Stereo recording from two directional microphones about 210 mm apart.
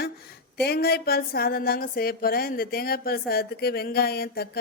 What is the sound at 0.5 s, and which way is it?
A woman's voice, 50° left (ahead or behind).